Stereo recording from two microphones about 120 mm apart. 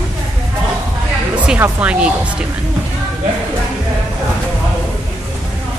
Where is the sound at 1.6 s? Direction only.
10° right (ahead or behind).